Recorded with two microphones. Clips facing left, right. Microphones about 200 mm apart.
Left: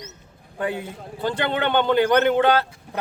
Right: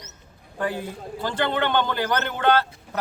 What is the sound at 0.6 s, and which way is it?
Speech, 20° left (ahead or behind).